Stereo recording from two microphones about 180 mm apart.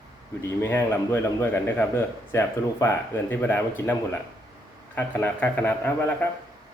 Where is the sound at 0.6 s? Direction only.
15° left (ahead or behind).